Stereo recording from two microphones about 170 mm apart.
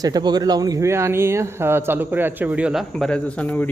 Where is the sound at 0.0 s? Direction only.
25° right (ahead or behind); by 2.8 s 5° right (ahead or behind).